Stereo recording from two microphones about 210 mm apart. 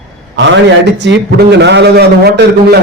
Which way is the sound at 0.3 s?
60° right (ahead or behind).